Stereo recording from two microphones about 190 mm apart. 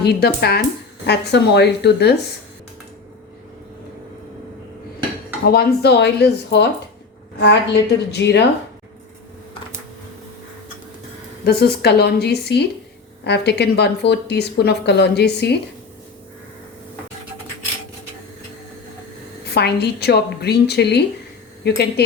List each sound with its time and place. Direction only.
0.0 s speech: 55° left (ahead or behind)
5.5 s speech: 55° left (ahead or behind)
11.4 s speech: 55° left (ahead or behind)
19.5 s speech: 60° left (ahead or behind)